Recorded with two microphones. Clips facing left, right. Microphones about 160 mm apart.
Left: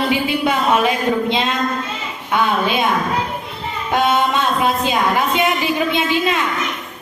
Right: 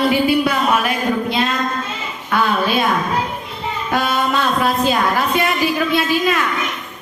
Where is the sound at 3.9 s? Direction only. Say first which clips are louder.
Left 2 dB; 20° left (ahead or behind).